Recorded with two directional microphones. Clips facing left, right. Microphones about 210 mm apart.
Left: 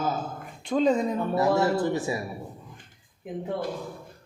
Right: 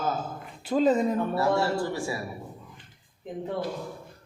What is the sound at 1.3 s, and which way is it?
Speech, 20° left (ahead or behind).